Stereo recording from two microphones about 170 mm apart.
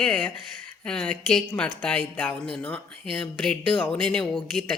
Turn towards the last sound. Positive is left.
turn(degrees=5)  # may be behind; listen again after turning